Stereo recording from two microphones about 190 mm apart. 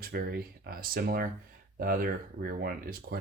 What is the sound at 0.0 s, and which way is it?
Speech, 55° right (ahead or behind).